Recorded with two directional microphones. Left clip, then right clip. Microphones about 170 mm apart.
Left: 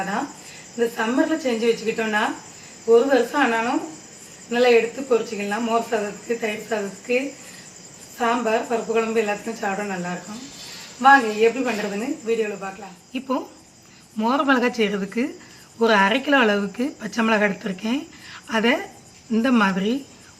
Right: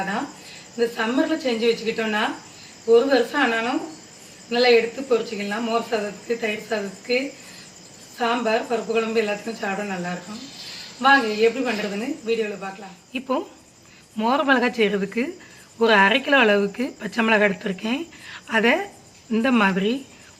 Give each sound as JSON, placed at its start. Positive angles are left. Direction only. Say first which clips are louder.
{"t": 0.0, "sound": "speech", "louder": "left 1 dB", "side_deg": 0}
{"t": 8.2, "sound": "speech", "louder": "left 1 dB", "side_deg": 0}
{"t": 13.1, "sound": "speech", "louder": "right 1 dB", "side_deg": -35}